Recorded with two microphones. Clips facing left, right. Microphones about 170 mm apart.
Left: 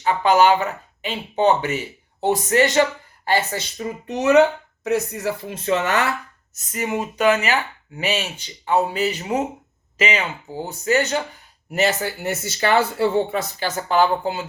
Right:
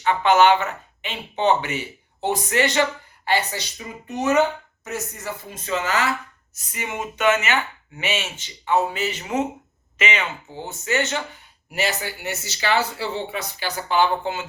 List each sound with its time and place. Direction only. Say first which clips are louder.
0.0 s speech: left 1 dB; 35° left (ahead or behind)
4.1 s speech: left 5 dB; 70° left (ahead or behind)
6.6 s speech: left 5 dB; 45° left (ahead or behind)